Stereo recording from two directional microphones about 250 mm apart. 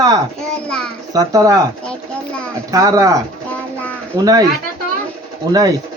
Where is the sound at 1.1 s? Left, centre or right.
Centre.